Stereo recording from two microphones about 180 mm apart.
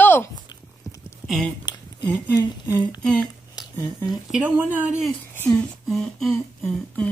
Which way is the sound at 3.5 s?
15° left (ahead or behind).